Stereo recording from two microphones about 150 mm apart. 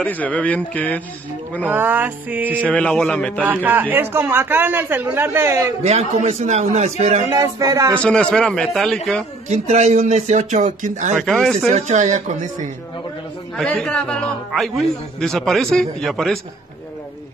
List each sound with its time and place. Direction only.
0.0 s speech: 10° left (ahead or behind)
1.7 s speech: 10° right (ahead or behind)
2.7 s speech: 5° left (ahead or behind)
3.4 s speech: 10° right (ahead or behind)
5.9 s speech: 45° right (ahead or behind)
7.2 s a sound: 20° right (ahead or behind)
8.0 s a man's voice: 5° left (ahead or behind)
9.5 s speech: 50° right (ahead or behind)
13.6 s a man's voice: 5° left (ahead or behind)